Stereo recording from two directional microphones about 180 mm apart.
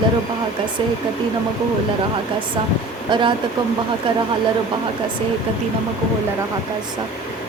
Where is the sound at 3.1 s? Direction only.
25° right (ahead or behind).